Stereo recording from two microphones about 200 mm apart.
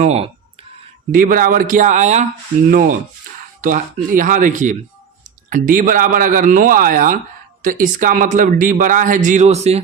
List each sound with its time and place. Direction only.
0.0 s a man's voice: 30° right (ahead or behind)
1.1 s a man's voice: 45° right (ahead or behind)